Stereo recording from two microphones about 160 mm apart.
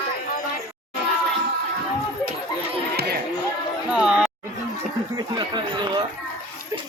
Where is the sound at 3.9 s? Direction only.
5° right (ahead or behind).